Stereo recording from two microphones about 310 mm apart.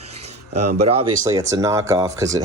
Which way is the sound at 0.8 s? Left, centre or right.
Centre.